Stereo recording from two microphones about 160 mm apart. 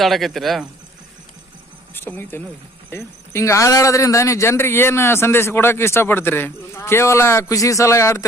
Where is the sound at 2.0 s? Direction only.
15° left (ahead or behind).